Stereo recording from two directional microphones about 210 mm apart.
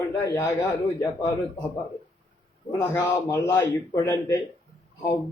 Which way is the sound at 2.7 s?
10° left (ahead or behind).